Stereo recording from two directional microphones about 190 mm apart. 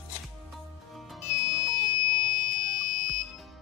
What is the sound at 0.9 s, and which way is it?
Music, centre (ahead or behind).